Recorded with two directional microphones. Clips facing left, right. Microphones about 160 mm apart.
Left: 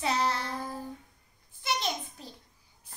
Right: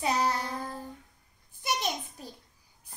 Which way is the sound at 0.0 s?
15° right (ahead or behind).